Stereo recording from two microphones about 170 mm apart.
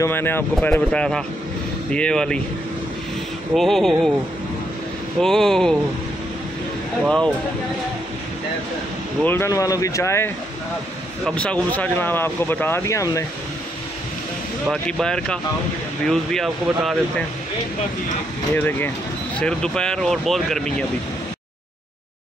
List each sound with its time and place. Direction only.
0.0 s speech: 15° left (ahead or behind)
3.5 s speech: centre (ahead or behind)
5.2 s speech: 5° left (ahead or behind)
7.0 s speech: 5° left (ahead or behind)
9.2 s speech: 15° left (ahead or behind)
14.7 s speech: 5° left (ahead or behind)
18.5 s speech: 10° left (ahead or behind)